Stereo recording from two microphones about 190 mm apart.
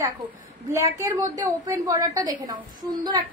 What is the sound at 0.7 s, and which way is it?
A woman's voice, 15° right (ahead or behind).